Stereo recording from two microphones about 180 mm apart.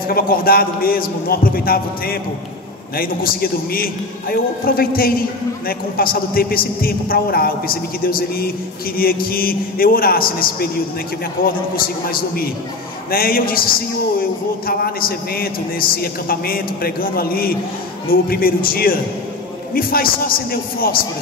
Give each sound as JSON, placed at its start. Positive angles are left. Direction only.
{"t": 0.1, "sound": "a man's voice", "side_deg": 55}